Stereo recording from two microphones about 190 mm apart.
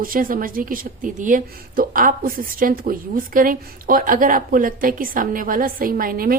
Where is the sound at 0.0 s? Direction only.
45° right (ahead or behind).